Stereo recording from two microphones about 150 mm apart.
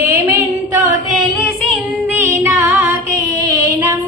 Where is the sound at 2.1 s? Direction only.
20° right (ahead or behind).